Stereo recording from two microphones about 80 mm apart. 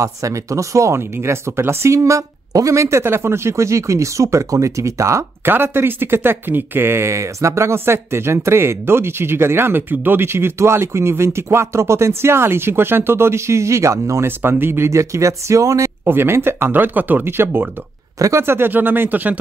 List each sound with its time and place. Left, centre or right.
0.0 s speech: right
5.4 s speech: right
14.4 s speech: right
16.1 s speech: right